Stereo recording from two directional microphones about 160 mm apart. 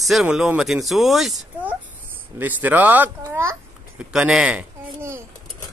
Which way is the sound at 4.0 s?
5° right (ahead or behind).